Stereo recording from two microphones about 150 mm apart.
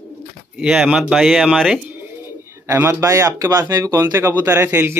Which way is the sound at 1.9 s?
15° right (ahead or behind).